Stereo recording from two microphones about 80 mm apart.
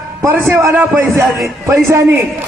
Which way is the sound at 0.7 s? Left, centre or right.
Right.